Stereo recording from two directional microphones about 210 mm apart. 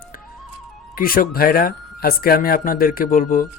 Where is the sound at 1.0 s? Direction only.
45° left (ahead or behind).